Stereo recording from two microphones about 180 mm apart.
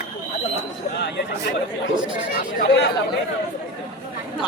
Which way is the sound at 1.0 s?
70° left (ahead or behind).